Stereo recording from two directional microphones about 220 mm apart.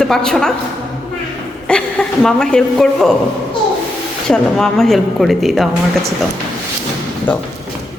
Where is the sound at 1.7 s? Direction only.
5° left (ahead or behind).